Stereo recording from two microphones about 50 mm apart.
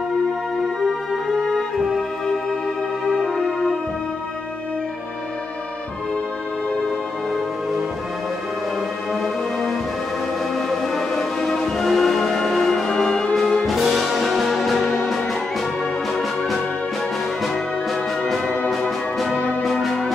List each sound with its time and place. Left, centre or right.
9.1 s music: centre
12.9 s music: centre
13.7 s music: centre
18.7 s music: centre